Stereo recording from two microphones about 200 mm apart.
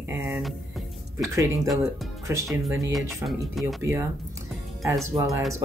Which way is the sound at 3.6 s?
Centre (ahead or behind).